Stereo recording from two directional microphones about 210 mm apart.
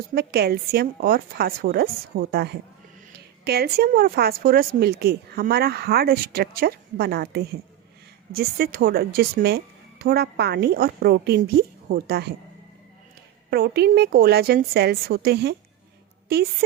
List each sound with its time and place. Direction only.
0.1 s speech: 50° right (ahead or behind)
13.5 s speech: 50° right (ahead or behind)